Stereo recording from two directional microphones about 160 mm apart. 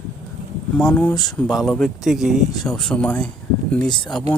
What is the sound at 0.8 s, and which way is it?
Speech, 5° left (ahead or behind).